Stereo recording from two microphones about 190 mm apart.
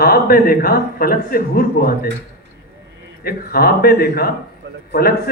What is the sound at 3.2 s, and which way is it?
A man's voice, 50° left (ahead or behind).